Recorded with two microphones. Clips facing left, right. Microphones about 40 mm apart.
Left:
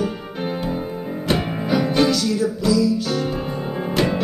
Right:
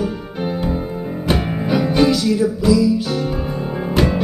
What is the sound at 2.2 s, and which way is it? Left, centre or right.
Music, centre.